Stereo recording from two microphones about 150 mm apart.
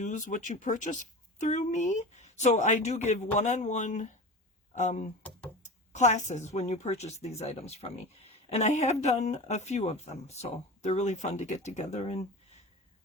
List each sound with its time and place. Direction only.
0.0 s a woman's voice: 55° left (ahead or behind)